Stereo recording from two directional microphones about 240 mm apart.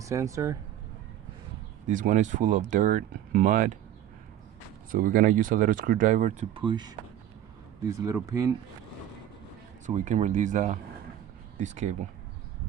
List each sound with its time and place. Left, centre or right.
0.0 s speech: centre
1.9 s speech: right
4.9 s speech: right; by 8.5 s centre
9.8 s speech: right